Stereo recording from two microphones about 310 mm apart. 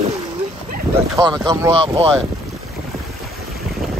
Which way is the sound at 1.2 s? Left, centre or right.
Centre.